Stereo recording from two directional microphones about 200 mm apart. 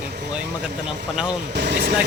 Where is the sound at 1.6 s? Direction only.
50° right (ahead or behind).